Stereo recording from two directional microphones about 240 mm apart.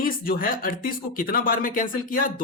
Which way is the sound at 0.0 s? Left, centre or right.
Left.